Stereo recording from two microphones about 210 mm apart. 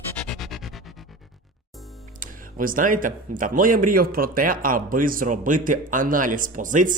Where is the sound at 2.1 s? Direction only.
40° right (ahead or behind).